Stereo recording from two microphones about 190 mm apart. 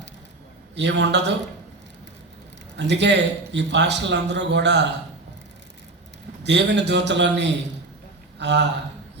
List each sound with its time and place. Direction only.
0.8 s a man's voice: 65° right (ahead or behind)
2.7 s a man's voice: 65° right (ahead or behind)
6.4 s a man's voice: 65° right (ahead or behind)